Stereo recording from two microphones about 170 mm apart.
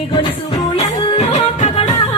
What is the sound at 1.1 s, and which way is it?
Music, 35° left (ahead or behind).